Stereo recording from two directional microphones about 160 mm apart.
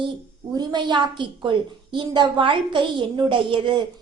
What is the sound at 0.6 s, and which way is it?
A woman's voice, 25° right (ahead or behind).